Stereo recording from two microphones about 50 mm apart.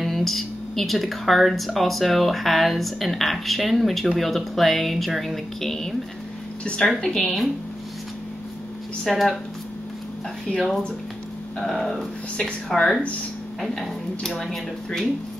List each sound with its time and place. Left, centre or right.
0.0 s speech: centre
6.6 s a woman's voice: left
7.0 s speech: centre
9.0 s speech: centre
11.6 s speech: centre